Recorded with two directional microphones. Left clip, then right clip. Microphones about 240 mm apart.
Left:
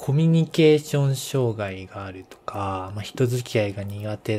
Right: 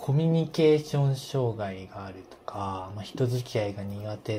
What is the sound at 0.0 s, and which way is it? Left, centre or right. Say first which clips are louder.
Speech: left 3 dB; left.